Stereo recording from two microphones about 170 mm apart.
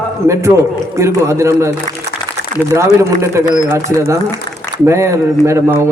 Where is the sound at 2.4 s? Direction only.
85° right.